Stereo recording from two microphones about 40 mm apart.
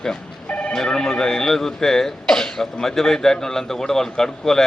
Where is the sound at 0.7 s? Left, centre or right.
Centre.